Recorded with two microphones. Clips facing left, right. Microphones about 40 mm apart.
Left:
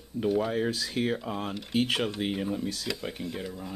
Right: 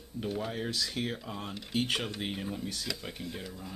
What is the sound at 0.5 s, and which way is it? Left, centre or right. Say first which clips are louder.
Speech: left 6 dB; left.